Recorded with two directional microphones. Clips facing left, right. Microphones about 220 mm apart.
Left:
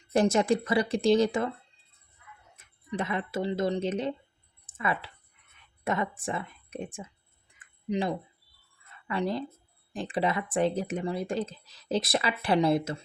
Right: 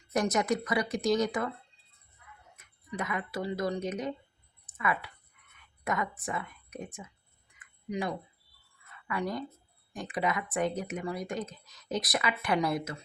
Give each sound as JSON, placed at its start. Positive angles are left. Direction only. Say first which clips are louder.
{"t": 0.1, "sound": "speech", "louder": "left 5 dB", "side_deg": 30}
{"t": 2.6, "sound": "speech", "louder": "left 4 dB", "side_deg": 30}
{"t": 7.6, "sound": "a sound", "louder": "left 4 dB", "side_deg": 25}
{"t": 9.0, "sound": "speech", "louder": "left 4 dB", "side_deg": 25}